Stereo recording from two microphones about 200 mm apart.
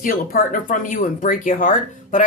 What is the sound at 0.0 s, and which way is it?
Speech, 45° left (ahead or behind).